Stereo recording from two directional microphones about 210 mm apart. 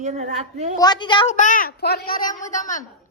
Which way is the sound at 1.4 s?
40° left (ahead or behind).